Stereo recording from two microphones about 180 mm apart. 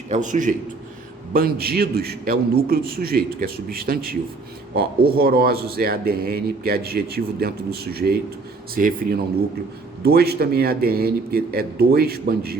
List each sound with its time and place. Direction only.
0.1 s a man's voice: 45° right (ahead or behind)
1.3 s a man's voice: 55° right (ahead or behind)